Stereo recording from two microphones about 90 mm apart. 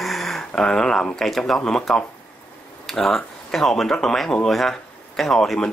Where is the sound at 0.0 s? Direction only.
Centre (ahead or behind).